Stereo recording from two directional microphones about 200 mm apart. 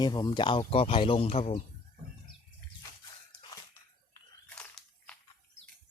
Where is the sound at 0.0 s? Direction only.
20° left (ahead or behind).